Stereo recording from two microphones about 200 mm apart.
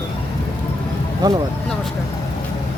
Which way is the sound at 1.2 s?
20° right (ahead or behind).